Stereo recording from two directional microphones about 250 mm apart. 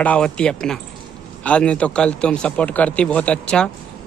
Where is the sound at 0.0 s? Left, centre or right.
Centre.